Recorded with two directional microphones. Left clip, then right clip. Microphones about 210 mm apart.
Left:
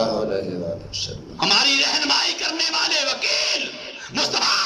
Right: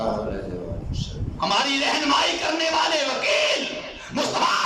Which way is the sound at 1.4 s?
50° left (ahead or behind).